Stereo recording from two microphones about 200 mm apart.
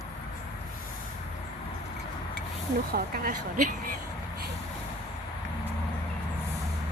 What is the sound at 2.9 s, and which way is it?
Speech, 45° right (ahead or behind).